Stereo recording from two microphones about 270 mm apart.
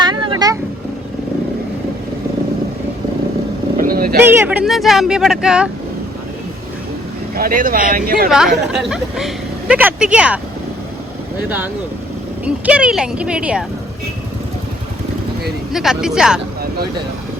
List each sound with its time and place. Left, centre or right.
0.0 s vehicle: centre
3.8 s vehicle: right
4.2 s speech: centre
7.3 s speech: right
8.3 s speech: centre
15.7 s speech: centre